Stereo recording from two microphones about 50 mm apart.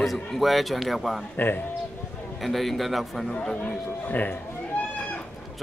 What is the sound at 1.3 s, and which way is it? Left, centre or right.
Speech, left.